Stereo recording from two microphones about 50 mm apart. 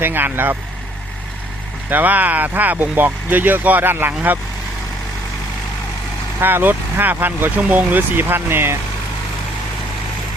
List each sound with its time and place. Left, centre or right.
0.0 s speech: right
1.9 s speech: right
6.4 s speech: right